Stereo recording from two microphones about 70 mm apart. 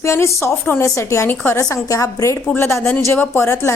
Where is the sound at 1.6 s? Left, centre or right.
Left.